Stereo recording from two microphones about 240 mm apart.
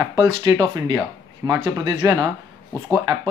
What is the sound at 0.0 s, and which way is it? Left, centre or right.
Speech, centre.